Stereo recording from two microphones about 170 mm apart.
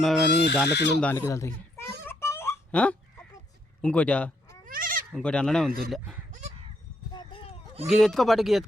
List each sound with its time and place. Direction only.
0.0 s speech: centre (ahead or behind)
0.3 s speech: 80° left
1.1 s a man's voice: 15° left (ahead or behind)
2.0 s a sound: 15° left (ahead or behind)
3.8 s speech: 10° left (ahead or behind)
4.6 s goat: 55° right (ahead or behind)
5.1 s speech: 5° left (ahead or behind)
6.3 s crow: 45° right (ahead or behind)
7.1 s clip-clop: 30° left (ahead or behind)
7.9 s speech: centre (ahead or behind)